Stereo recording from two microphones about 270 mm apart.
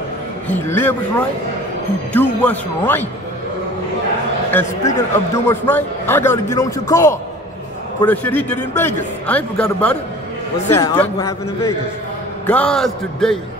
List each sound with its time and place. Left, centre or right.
0.5 s a man's voice: centre
2.1 s a man's voice: centre
4.5 s a man's voice: centre